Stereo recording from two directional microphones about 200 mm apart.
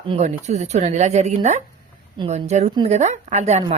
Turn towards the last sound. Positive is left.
turn(degrees=-35)  # may be behind; listen again after turning